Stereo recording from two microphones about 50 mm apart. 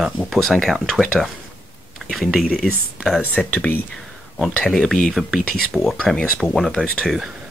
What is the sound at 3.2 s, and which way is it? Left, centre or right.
Speech, left.